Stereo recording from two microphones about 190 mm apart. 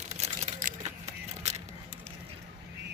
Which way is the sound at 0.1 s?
35° right (ahead or behind).